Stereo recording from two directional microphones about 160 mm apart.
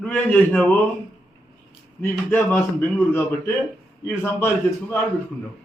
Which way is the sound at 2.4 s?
5° left (ahead or behind).